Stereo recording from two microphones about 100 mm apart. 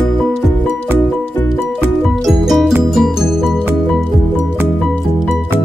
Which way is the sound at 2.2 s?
Centre (ahead or behind).